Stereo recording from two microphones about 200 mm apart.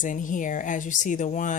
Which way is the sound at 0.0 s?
40° left (ahead or behind).